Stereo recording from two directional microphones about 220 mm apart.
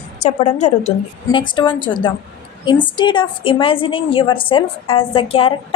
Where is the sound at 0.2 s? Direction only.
30° left (ahead or behind).